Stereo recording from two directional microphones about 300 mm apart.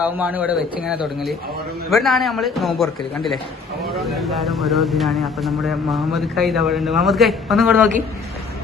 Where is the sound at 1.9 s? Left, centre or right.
Centre.